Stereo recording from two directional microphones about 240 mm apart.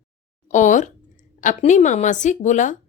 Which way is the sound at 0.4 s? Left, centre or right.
Left.